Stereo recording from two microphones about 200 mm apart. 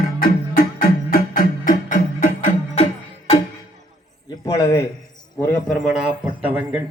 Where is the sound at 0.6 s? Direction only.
45° left (ahead or behind).